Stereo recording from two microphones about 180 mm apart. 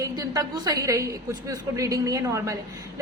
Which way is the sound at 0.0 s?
20° right (ahead or behind).